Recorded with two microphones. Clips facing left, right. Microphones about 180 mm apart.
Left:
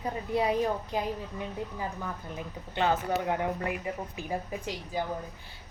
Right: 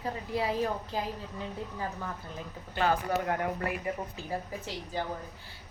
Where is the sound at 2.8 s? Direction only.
20° left (ahead or behind).